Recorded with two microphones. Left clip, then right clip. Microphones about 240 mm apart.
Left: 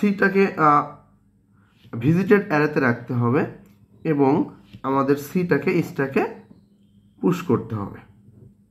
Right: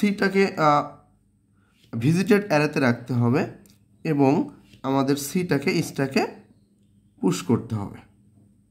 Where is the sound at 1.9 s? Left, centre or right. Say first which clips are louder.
Left 3 dB; right.